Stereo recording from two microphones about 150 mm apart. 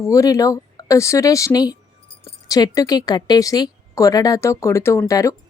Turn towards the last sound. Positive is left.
turn(degrees=20)  # may be behind; listen again after turning